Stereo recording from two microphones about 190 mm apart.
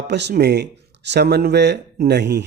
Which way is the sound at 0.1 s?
60° right (ahead or behind).